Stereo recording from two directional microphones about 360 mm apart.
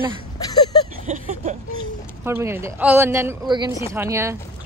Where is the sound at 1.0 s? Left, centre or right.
Right.